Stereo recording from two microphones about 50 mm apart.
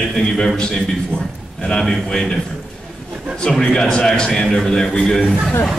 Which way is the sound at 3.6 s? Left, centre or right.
Centre.